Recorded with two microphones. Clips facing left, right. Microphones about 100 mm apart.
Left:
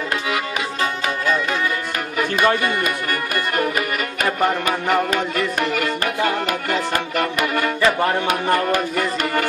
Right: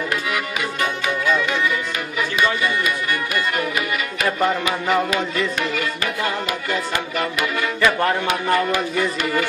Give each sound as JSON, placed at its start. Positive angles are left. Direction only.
{"t": 2.4, "sound": "music", "side_deg": 50}
{"t": 4.6, "sound": "music", "side_deg": 50}